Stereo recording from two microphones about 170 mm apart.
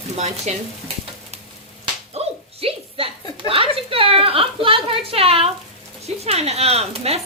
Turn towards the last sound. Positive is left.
turn(degrees=-35)  # may be behind; listen again after turning